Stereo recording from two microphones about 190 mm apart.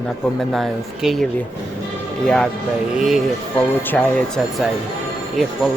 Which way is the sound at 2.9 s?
Centre (ahead or behind).